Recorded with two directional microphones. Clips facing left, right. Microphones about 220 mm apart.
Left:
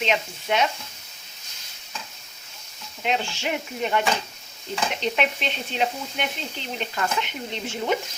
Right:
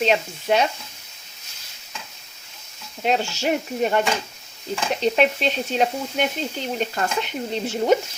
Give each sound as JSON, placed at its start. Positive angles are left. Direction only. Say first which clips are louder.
{"t": 0.0, "sound": "sizzle", "louder": "right 5 dB", "side_deg": -35}
{"t": 3.0, "sound": "sizzle", "louder": "right 4 dB", "side_deg": -40}